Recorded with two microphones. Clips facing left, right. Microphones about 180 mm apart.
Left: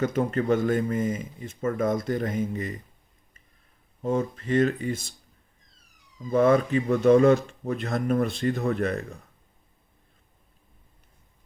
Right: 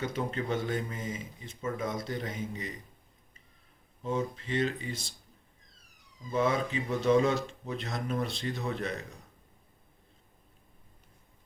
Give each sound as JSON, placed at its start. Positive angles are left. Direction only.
{"t": 0.0, "sound": "speech", "side_deg": 50}
{"t": 4.0, "sound": "speech", "side_deg": 50}
{"t": 6.3, "sound": "speech", "side_deg": 55}